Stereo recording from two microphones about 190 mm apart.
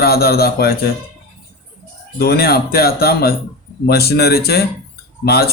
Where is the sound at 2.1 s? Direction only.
55° left (ahead or behind).